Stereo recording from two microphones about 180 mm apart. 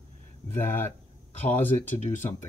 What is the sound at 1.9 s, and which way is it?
Speech, 40° left (ahead or behind).